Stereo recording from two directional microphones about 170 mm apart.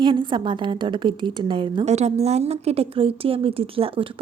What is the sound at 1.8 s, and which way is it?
A woman's voice, 40° right (ahead or behind).